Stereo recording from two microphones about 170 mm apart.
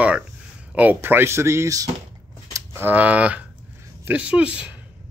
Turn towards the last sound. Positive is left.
turn(degrees=-5)  # may be behind; listen again after turning